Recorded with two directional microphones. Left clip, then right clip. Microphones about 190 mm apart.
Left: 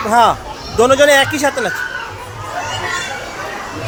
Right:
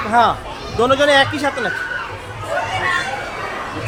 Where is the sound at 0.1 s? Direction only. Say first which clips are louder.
Left 3 dB; 20° left (ahead or behind).